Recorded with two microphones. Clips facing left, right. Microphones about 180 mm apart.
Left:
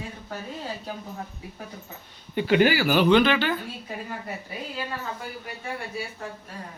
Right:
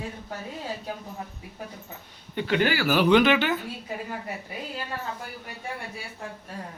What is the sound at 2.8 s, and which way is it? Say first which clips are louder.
Speech: even; 5° right (ahead or behind).